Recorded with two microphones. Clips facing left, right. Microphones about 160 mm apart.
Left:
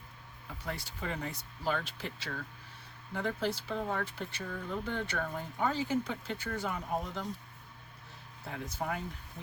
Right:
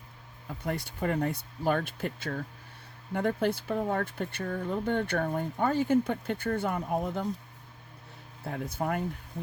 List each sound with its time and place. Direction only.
0.6 s speech: 55° right (ahead or behind)
8.4 s speech: 50° right (ahead or behind)